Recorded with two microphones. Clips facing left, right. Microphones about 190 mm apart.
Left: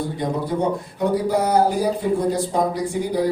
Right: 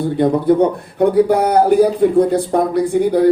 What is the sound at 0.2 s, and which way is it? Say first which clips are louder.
Speech: right 10 dB; 60° right (ahead or behind).